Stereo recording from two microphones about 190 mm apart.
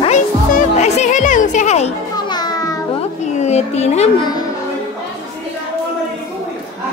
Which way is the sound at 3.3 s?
35° left (ahead or behind).